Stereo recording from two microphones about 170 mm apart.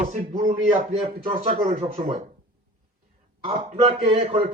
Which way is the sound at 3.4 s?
35° right (ahead or behind).